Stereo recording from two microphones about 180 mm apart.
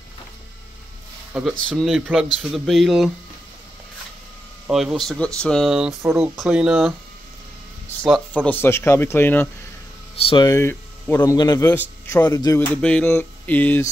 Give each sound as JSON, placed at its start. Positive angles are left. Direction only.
{"t": 1.3, "sound": "speech", "side_deg": -5}
{"t": 4.6, "sound": "speech", "side_deg": -5}
{"t": 6.0, "sound": "speech", "side_deg": -15}
{"t": 6.3, "sound": "speech", "side_deg": -5}
{"t": 8.0, "sound": "speech", "side_deg": 5}
{"t": 10.1, "sound": "a man's voice", "side_deg": 30}